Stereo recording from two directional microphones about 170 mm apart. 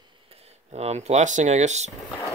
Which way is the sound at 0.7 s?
40° right (ahead or behind).